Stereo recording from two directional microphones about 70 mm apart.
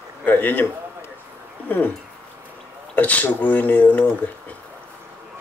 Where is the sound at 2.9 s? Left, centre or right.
Left.